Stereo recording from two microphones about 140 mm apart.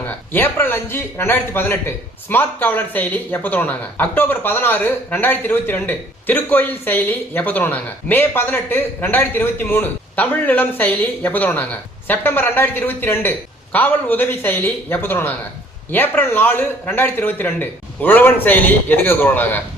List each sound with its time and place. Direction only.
0.3 s speech: 15° left (ahead or behind)